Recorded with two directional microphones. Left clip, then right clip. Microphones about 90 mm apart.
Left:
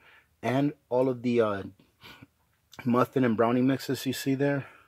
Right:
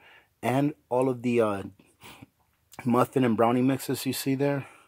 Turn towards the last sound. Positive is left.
turn(degrees=-20)  # may be behind; listen again after turning